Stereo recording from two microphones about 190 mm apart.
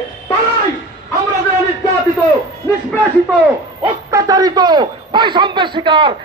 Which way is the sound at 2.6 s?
10° left (ahead or behind).